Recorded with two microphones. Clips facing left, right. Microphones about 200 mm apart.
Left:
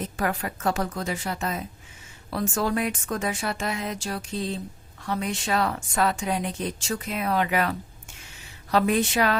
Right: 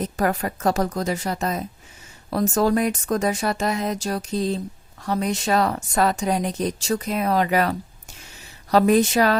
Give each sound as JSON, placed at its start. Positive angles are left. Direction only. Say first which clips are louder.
{"t": 0.0, "sound": "speech", "louder": "right 5 dB", "side_deg": -40}